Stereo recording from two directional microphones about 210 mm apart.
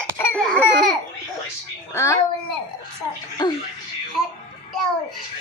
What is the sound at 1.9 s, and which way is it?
Speech, 15° left (ahead or behind).